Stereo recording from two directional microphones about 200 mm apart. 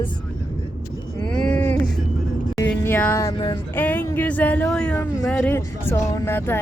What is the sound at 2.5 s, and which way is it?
Speech, 10° left (ahead or behind).